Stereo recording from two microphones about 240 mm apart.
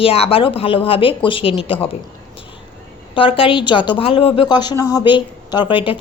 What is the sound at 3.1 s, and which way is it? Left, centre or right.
A woman's voice, left.